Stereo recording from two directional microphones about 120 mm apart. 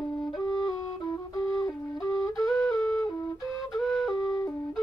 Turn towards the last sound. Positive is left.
turn(degrees=30)  # may be behind; listen again after turning